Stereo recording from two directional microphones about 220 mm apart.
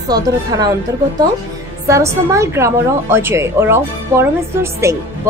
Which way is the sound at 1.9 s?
15° right (ahead or behind).